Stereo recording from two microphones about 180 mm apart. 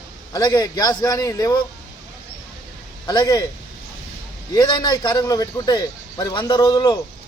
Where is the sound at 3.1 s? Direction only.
25° left (ahead or behind).